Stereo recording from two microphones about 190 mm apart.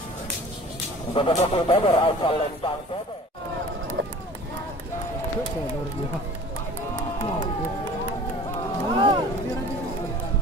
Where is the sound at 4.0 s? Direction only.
70° right (ahead or behind).